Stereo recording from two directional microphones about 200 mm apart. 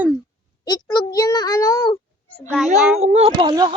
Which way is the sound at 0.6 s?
20° left (ahead or behind).